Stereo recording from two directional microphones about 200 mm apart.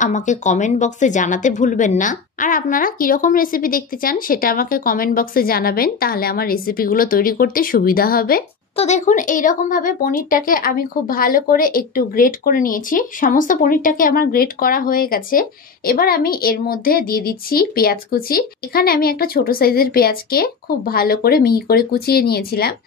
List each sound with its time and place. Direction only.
0.0 s speech: 35° left (ahead or behind)
8.7 s speech: 35° left (ahead or behind); by 22.8 s 50° left (ahead or behind)